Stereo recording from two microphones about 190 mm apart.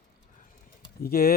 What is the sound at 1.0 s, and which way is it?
Speech, 50° left (ahead or behind).